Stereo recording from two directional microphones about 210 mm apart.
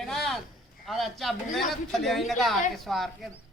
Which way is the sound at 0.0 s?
Centre (ahead or behind).